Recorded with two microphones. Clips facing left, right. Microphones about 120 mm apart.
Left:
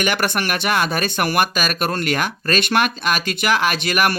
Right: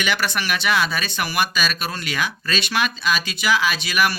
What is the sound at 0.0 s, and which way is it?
Speech, 50° left (ahead or behind).